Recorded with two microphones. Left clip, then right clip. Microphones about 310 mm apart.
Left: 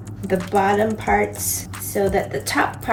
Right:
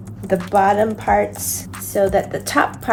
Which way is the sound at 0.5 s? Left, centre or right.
Centre.